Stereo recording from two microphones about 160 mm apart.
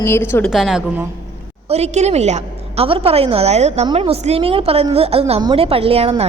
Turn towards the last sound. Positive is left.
turn(degrees=-40)  # may be behind; listen again after turning